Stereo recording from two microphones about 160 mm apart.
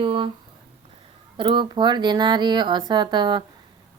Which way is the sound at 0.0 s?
35° right (ahead or behind).